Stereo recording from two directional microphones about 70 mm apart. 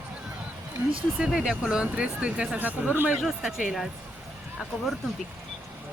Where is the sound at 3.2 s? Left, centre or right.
Centre.